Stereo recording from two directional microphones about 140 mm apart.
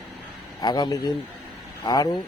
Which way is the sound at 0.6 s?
30° left (ahead or behind).